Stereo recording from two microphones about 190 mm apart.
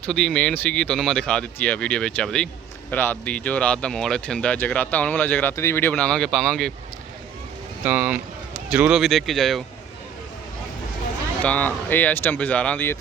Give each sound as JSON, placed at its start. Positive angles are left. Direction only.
{"t": 0.1, "sound": "speech", "side_deg": 5}
{"t": 7.9, "sound": "speech", "side_deg": -5}
{"t": 11.4, "sound": "speech", "side_deg": 10}